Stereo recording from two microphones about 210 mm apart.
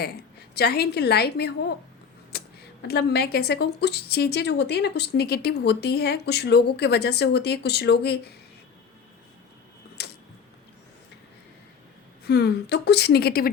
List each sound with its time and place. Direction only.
0.0 s a woman's voice: 50° left (ahead or behind)
2.3 s a sound: 50° left (ahead or behind)
2.8 s a woman's voice: 50° left (ahead or behind)
10.0 s tick-tock: 50° left (ahead or behind)
12.3 s a woman's voice: 50° left (ahead or behind)